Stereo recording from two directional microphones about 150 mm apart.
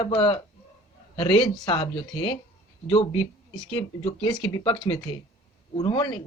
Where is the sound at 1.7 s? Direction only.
40° left (ahead or behind).